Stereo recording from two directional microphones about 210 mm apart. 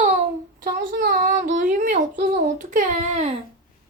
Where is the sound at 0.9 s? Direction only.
45° right (ahead or behind).